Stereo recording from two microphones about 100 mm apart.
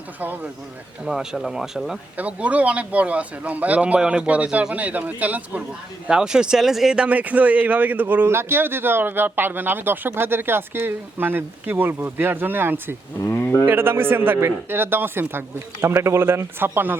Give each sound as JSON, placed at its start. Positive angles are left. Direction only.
{"t": 0.2, "sound": "a man's voice", "side_deg": -15}
{"t": 1.0, "sound": "a man's voice", "side_deg": -5}
{"t": 13.2, "sound": "speech", "side_deg": 25}
{"t": 13.7, "sound": "speech", "side_deg": -25}